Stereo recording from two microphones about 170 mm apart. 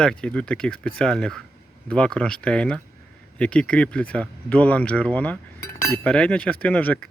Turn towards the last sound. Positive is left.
turn(degrees=10)  # may be behind; listen again after turning